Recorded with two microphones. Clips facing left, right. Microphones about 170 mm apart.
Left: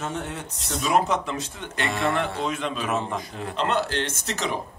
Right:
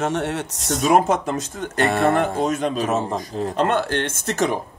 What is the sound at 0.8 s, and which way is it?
A man's voice, 50° right (ahead or behind).